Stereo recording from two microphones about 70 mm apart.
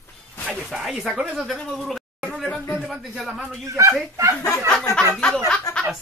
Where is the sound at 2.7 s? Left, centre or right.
Centre.